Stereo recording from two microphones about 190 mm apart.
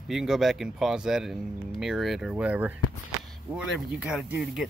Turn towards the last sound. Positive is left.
turn(degrees=-5)  # may be behind; listen again after turning